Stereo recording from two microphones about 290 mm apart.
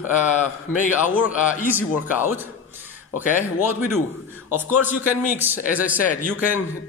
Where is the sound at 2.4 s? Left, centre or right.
Centre.